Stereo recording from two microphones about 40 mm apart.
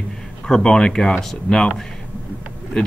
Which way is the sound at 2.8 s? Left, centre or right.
Centre.